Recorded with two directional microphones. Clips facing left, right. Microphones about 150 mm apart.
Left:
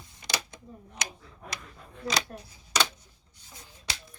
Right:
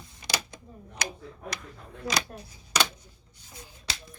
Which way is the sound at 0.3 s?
15° left (ahead or behind).